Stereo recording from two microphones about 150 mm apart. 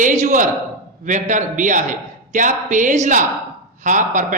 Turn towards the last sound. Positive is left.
turn(degrees=-60)  # may be behind; listen again after turning